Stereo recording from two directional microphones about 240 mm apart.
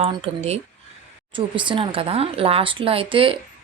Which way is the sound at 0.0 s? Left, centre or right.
Right.